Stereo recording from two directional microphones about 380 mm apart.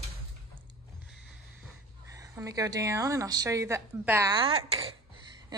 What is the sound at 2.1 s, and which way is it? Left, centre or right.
A woman's voice, centre.